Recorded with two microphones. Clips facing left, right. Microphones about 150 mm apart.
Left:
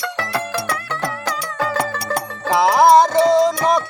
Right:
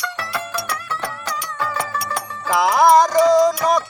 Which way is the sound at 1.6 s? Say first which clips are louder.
Left 3 dB; 65° left (ahead or behind).